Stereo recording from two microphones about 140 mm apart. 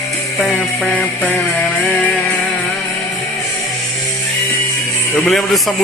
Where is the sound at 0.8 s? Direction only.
Centre (ahead or behind).